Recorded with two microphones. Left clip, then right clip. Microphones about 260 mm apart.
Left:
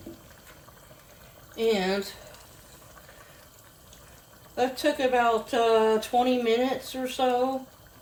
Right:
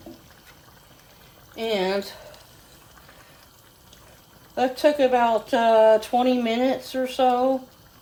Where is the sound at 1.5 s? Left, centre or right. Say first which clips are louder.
Right 1 dB; right.